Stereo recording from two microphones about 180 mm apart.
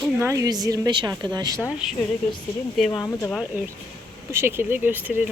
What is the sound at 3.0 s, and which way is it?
Speech, 15° left (ahead or behind).